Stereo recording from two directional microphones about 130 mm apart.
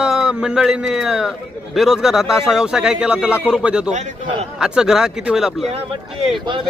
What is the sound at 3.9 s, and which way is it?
Speech, 65° right (ahead or behind).